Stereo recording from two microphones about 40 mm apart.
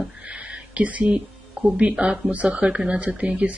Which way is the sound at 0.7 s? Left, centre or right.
Right.